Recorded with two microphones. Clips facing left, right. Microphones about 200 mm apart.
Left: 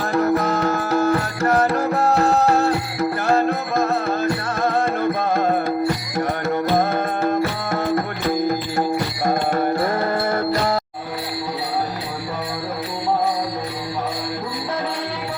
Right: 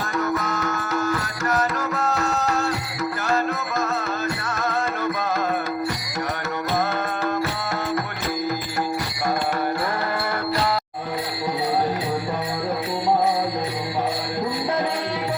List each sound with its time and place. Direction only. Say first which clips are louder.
0.1 s music: left 7 dB; 35° left (ahead or behind)
0.3 s music: left 6 dB; 60° left (ahead or behind)
0.6 s music: left 6 dB; 35° left (ahead or behind)
1.1 s music: left 6 dB; 60° left (ahead or behind)
6.7 s music: left 4 dB; 50° left (ahead or behind)
9.2 s music: left 3 dB; 30° left (ahead or behind)